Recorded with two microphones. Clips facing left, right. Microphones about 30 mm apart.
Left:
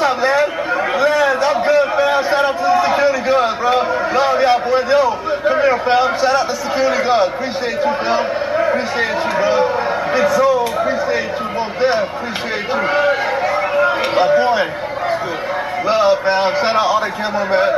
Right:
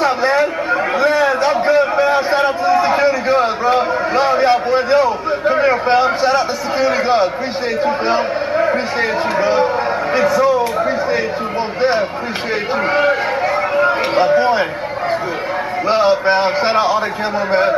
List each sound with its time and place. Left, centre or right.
0.0 s chatter: centre
0.9 s a sound: centre
7.8 s a man's voice: centre
10.8 s a sound: centre
13.1 s chatter: centre
15.9 s a man's voice: centre